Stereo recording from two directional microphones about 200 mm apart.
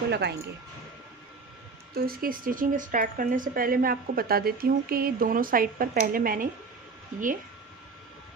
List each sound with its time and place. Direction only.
0.1 s speech: 55° right (ahead or behind)
2.0 s speech: 45° right (ahead or behind)